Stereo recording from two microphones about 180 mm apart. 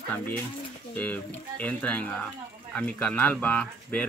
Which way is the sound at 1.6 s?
5° left (ahead or behind).